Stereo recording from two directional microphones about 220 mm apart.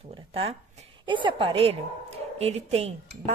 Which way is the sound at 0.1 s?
25° right (ahead or behind).